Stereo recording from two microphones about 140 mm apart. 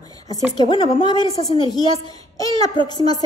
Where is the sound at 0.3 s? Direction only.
30° left (ahead or behind).